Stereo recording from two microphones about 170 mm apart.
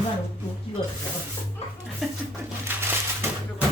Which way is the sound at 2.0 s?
Centre (ahead or behind).